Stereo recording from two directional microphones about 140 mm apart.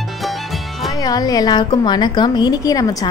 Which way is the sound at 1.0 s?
25° left (ahead or behind).